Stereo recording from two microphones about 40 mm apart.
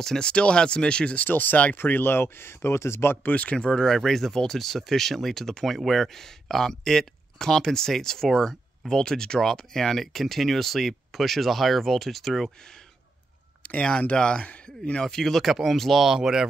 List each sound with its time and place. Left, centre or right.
0.2 s speech: left
1.1 s speech: left
3.3 s speech: left
3.8 s speech: centre
13.6 s speech: left; by 15.4 s centre
15.4 s speech: centre
16.2 s speech: centre